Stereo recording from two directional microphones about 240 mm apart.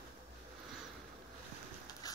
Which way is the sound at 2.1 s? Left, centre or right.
Centre.